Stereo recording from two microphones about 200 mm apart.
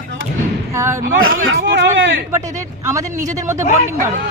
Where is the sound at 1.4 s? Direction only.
55° right (ahead or behind).